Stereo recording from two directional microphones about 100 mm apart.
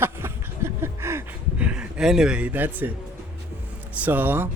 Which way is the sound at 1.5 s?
10° right (ahead or behind).